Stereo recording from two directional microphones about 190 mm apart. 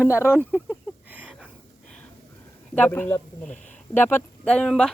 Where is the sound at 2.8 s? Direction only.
10° left (ahead or behind).